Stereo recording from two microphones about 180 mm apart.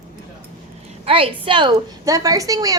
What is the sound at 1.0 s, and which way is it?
A woman's voice, 30° right (ahead or behind).